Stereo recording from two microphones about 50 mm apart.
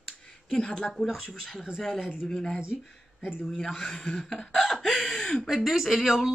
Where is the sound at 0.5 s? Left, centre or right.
Centre.